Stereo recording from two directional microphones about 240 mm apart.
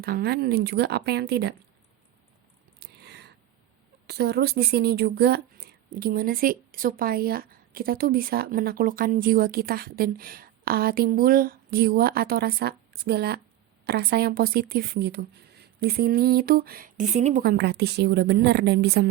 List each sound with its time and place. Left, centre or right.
0.0 s a woman's voice: right
2.8 s a sound: right
4.0 s speech: right